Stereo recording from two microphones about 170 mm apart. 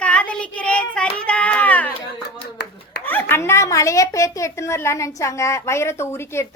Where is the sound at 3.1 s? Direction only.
10° left (ahead or behind).